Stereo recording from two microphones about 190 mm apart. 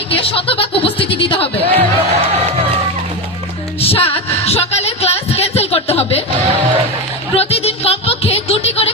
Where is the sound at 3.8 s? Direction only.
30° left (ahead or behind).